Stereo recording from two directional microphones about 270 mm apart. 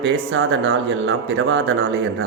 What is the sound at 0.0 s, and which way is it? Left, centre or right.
Speech, right.